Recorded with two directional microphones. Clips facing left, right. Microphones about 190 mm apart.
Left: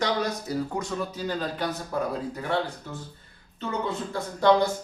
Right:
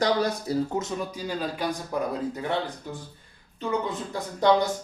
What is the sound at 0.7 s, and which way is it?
Speech, 15° right (ahead or behind).